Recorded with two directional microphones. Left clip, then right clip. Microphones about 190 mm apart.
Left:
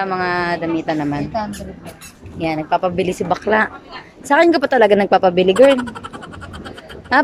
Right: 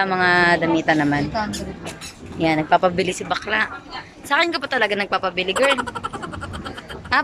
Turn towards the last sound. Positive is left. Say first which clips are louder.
# left 5 dB
turn(degrees=40)  # may be behind; listen again after turning